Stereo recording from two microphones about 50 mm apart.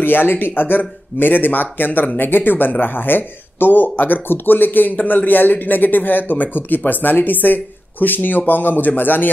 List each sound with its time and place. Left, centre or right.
0.0 s speech: left